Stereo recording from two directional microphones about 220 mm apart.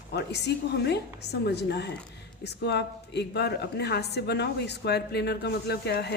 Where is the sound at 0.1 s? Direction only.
50° left (ahead or behind).